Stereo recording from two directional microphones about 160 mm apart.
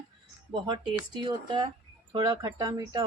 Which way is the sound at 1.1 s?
25° right (ahead or behind).